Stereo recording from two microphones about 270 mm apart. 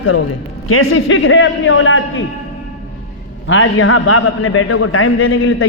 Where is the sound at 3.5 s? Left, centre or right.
Left.